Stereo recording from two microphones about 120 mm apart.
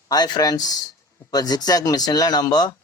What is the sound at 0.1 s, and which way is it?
A man's voice, 35° left (ahead or behind).